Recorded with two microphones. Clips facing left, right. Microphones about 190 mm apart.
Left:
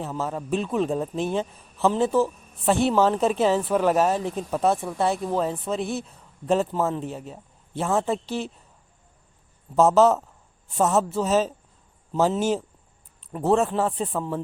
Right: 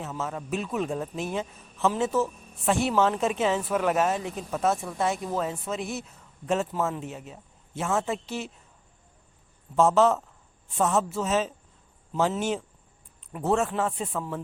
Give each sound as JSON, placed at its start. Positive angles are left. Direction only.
{"t": 0.0, "sound": "a man's voice", "side_deg": 35}
{"t": 9.7, "sound": "a man's voice", "side_deg": 40}